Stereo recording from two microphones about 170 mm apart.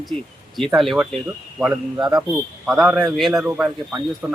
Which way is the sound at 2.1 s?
5° right (ahead or behind).